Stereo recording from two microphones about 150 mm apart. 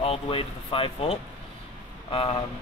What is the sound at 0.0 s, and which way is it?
Speech, 40° left (ahead or behind).